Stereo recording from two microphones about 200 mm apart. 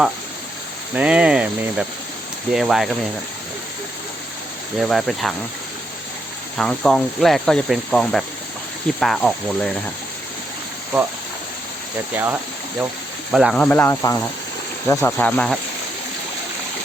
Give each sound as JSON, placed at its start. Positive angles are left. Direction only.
{"t": 0.9, "sound": "speech", "side_deg": -5}
{"t": 4.8, "sound": "speech", "side_deg": 0}
{"t": 6.6, "sound": "speech", "side_deg": 5}
{"t": 12.1, "sound": "speech", "side_deg": -10}